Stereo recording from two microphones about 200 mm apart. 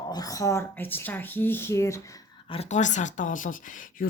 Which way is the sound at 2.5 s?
35° left (ahead or behind).